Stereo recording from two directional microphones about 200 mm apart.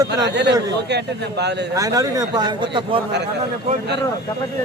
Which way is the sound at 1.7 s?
15° right (ahead or behind).